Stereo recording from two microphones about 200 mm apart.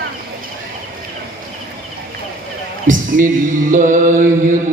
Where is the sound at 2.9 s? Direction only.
40° right (ahead or behind).